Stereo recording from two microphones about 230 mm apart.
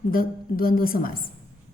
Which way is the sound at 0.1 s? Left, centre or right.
Left.